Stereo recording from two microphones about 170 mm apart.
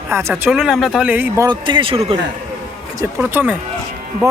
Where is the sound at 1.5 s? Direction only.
25° right (ahead or behind).